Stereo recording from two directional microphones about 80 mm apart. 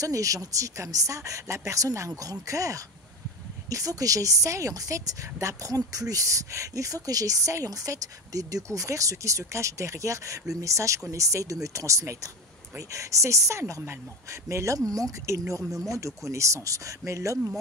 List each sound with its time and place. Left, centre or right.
0.0 s a woman's voice: right